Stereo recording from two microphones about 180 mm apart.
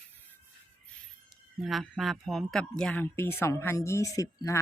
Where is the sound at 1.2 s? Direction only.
Centre (ahead or behind).